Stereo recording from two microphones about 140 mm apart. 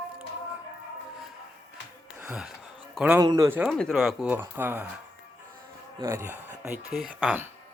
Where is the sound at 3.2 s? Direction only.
25° right (ahead or behind).